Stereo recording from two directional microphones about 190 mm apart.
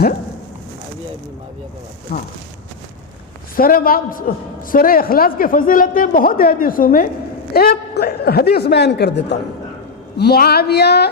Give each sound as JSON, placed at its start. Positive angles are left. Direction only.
{"t": 2.1, "sound": "a man's voice", "side_deg": 50}
{"t": 3.5, "sound": "a man's voice", "side_deg": 50}